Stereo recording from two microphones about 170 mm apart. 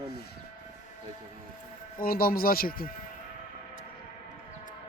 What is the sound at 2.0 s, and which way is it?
Speech, 60° left (ahead or behind).